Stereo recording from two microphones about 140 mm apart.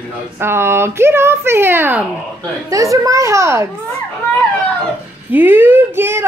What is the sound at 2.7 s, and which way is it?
Laughter, 25° right (ahead or behind).